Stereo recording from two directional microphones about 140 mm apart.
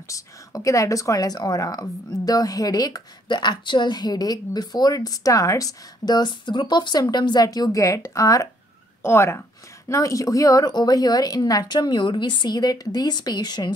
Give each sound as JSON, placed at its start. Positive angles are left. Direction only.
{"t": 0.1, "sound": "speech", "side_deg": 25}